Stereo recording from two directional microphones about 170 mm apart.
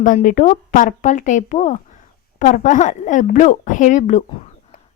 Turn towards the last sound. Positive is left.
turn(degrees=45)  # may be behind; listen again after turning